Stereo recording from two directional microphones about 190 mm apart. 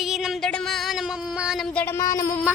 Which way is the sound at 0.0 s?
Centre (ahead or behind).